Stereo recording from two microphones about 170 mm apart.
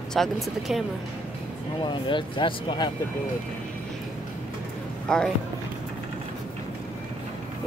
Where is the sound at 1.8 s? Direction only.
25° left (ahead or behind).